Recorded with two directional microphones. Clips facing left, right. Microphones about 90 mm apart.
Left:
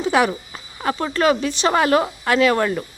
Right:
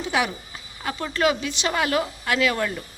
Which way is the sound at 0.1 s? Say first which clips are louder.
Left 6 dB; 45° left (ahead or behind).